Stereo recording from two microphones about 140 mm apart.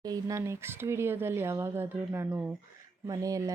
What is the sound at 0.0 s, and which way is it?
Speech, 25° right (ahead or behind).